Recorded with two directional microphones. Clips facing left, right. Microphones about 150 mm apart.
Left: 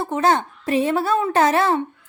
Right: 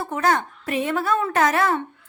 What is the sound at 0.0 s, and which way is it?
A woman's voice, 25° left (ahead or behind).